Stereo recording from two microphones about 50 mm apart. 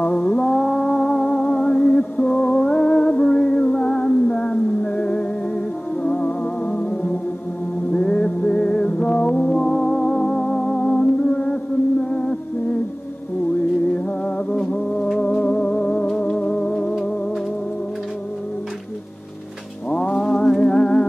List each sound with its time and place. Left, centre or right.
0.2 s music: left
20.1 s music: centre